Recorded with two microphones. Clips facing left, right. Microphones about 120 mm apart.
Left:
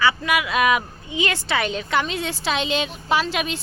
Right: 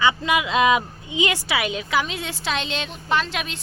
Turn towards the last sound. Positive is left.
turn(degrees=5)  # may be behind; listen again after turning